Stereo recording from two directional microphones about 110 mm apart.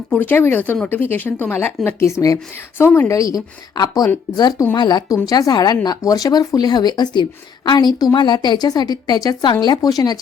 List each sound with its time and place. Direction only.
0.1 s speech: 15° left (ahead or behind); by 10.2 s 35° left (ahead or behind)